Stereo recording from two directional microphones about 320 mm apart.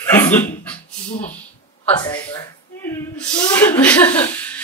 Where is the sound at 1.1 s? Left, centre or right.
Left.